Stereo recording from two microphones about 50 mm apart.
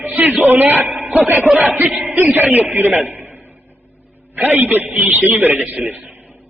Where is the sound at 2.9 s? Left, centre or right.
Right.